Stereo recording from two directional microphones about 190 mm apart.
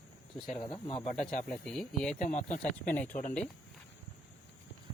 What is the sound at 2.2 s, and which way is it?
Speech, 40° left (ahead or behind).